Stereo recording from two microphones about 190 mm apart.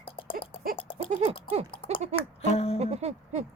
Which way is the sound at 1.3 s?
30° right (ahead or behind).